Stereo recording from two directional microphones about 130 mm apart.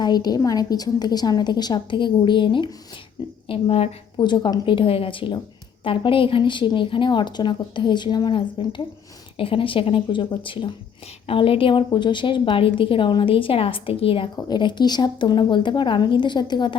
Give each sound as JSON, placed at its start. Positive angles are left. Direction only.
{"t": 0.0, "sound": "a woman's voice", "side_deg": 30}
{"t": 14.4, "sound": "a woman's voice", "side_deg": 35}